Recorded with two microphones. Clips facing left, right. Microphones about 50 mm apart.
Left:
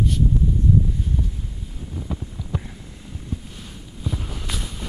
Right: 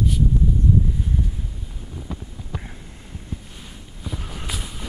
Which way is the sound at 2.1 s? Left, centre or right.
Centre.